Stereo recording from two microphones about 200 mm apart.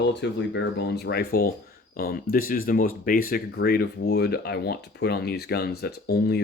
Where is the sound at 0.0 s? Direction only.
60° left (ahead or behind).